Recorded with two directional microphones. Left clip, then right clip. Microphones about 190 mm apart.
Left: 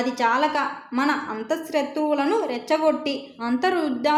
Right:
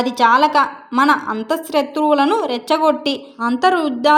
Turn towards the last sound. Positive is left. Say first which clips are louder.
# right 8 dB
turn(degrees=-35)  # may be behind; listen again after turning